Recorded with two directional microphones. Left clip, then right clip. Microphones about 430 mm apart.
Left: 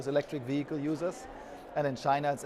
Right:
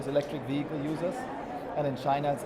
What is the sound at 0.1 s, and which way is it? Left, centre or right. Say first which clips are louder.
Speech: right 1 dB; left.